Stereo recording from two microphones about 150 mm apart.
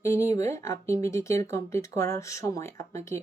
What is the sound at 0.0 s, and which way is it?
Speech, 20° left (ahead or behind).